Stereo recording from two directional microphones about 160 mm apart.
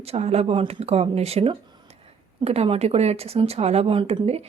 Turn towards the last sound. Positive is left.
turn(degrees=-40)  # may be behind; listen again after turning